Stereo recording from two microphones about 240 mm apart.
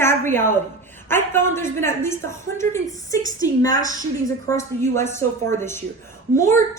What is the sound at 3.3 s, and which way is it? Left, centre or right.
A woman's voice, centre.